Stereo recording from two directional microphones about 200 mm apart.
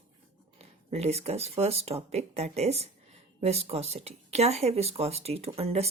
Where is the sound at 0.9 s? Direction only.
30° right (ahead or behind).